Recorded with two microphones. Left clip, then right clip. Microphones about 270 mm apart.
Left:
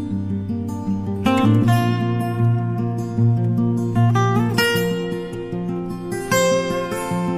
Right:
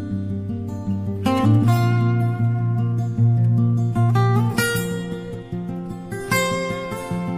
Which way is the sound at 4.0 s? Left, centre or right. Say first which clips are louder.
Left 2 dB; right.